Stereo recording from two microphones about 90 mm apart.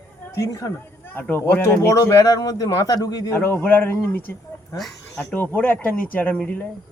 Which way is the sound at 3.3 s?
25° left (ahead or behind).